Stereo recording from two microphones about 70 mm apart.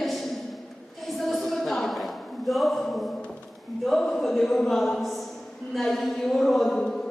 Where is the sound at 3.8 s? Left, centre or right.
Centre.